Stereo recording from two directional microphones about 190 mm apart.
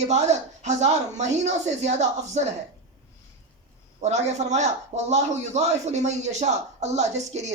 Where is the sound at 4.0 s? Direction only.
35° right (ahead or behind).